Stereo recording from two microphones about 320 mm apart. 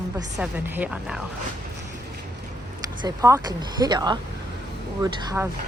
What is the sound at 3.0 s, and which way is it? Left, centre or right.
Speech, centre.